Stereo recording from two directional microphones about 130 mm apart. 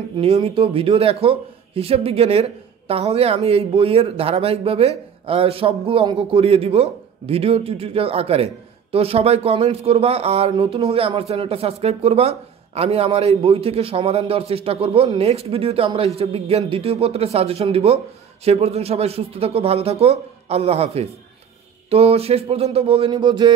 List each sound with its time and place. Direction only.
0.2 s speech: 50° right (ahead or behind)